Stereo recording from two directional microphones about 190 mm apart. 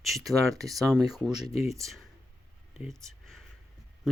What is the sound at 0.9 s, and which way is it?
Speech, centre (ahead or behind).